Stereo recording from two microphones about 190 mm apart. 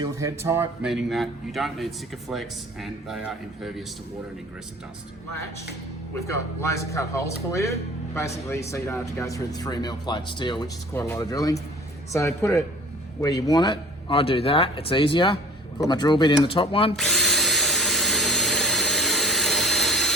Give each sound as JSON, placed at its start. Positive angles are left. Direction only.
{"t": 0.0, "sound": "speech", "side_deg": -15}
{"t": 0.9, "sound": "a man's voice", "side_deg": 0}
{"t": 6.1, "sound": "speech", "side_deg": 15}
{"t": 17.0, "sound": "drill", "side_deg": 0}